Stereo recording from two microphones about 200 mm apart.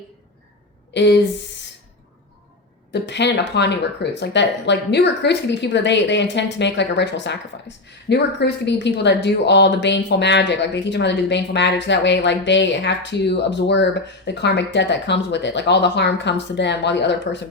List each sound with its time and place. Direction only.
0.9 s speech: 60° left (ahead or behind)
2.9 s speech: 60° left (ahead or behind)